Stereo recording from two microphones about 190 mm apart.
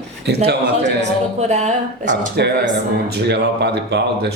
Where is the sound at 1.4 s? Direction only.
40° right (ahead or behind).